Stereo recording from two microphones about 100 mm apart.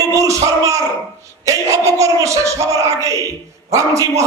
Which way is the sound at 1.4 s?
30° right (ahead or behind).